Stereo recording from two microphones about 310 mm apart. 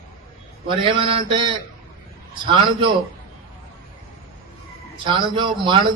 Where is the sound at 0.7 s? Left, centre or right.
Centre.